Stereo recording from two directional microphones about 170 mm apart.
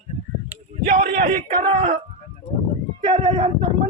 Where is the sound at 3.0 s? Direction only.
30° right (ahead or behind).